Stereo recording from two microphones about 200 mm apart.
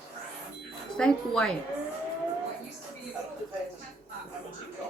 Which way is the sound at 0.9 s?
5° left (ahead or behind).